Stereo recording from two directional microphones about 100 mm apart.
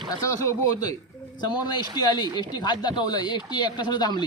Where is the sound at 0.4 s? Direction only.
40° left (ahead or behind).